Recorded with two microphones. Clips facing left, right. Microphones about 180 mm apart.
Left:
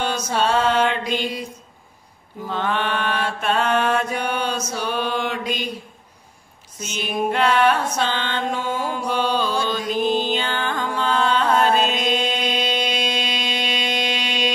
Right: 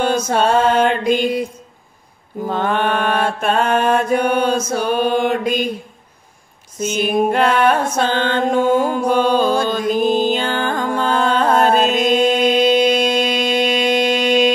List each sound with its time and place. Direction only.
0.0 s mantra: 50° right (ahead or behind)
2.4 s mantra: 45° right (ahead or behind)
6.8 s mantra: 50° right (ahead or behind)